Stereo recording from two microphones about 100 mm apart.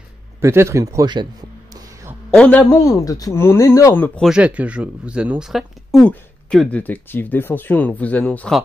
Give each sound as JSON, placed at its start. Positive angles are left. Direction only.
{"t": 0.4, "sound": "speech", "side_deg": -25}
{"t": 2.3, "sound": "speech", "side_deg": 10}
{"t": 2.7, "sound": "a man's voice", "side_deg": 35}
{"t": 3.9, "sound": "speech", "side_deg": 20}
{"t": 4.3, "sound": "speech", "side_deg": -10}
{"t": 6.0, "sound": "speech", "side_deg": 10}